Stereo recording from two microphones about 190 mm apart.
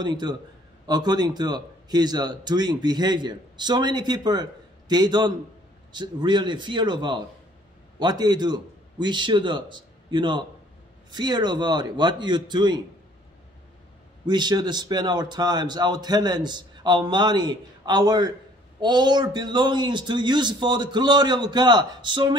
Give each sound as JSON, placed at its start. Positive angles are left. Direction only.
{"t": 0.0, "sound": "a man's voice", "side_deg": -25}
{"t": 14.2, "sound": "speech", "side_deg": -25}